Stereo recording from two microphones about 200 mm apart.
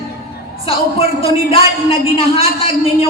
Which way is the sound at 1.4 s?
30° left (ahead or behind).